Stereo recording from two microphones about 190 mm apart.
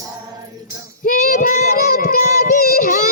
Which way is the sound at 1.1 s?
45° left (ahead or behind).